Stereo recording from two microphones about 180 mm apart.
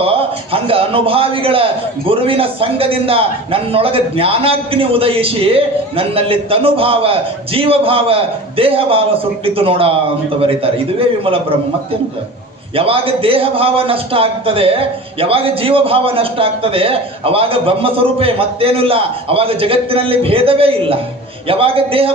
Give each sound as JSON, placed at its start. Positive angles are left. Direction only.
{"t": 0.0, "sound": "a man's voice", "side_deg": -30}